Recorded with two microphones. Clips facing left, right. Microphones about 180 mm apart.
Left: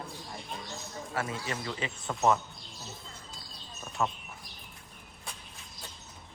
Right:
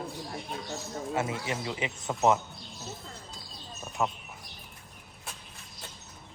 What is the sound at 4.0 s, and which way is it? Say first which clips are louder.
Speech: right 1 dB; 15° right (ahead or behind).